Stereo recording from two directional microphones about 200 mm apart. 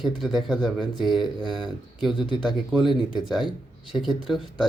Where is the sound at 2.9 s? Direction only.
20° left (ahead or behind).